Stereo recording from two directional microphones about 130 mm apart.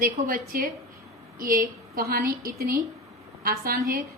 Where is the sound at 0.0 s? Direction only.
90° right.